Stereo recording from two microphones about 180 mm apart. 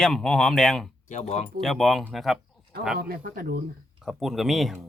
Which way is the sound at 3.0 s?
55° right (ahead or behind).